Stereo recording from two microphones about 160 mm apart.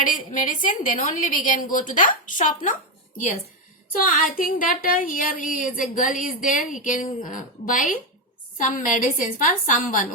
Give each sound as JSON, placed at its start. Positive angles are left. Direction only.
{"t": 0.0, "sound": "a woman's voice", "side_deg": 55}
{"t": 4.4, "sound": "a woman's voice", "side_deg": 60}